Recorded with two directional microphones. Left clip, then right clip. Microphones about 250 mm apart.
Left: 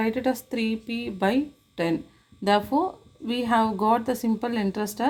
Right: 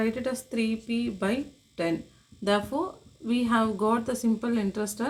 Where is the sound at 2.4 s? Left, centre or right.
Left.